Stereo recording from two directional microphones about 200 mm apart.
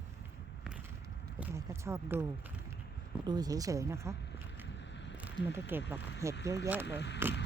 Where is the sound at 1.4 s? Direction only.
10° right (ahead or behind).